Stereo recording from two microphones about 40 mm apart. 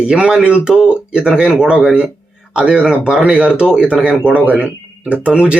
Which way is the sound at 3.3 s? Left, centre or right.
Right.